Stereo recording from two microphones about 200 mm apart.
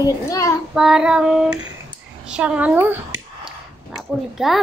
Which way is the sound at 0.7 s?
5° right (ahead or behind).